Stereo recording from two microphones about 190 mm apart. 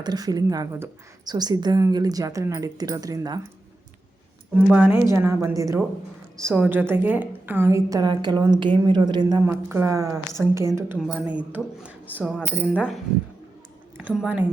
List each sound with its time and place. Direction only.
0.0 s a woman's voice: 20° right (ahead or behind)
4.5 s a woman's voice: 5° right (ahead or behind)
9.5 s a woman's voice: 10° right (ahead or behind)
10.9 s a woman's voice: centre (ahead or behind)
14.2 s a woman's voice: 5° right (ahead or behind)